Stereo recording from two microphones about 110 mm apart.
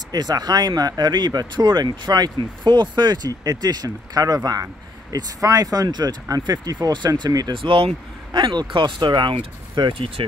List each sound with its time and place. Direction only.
0.1 s speech: 35° right (ahead or behind)
7.5 s speech: 55° right (ahead or behind)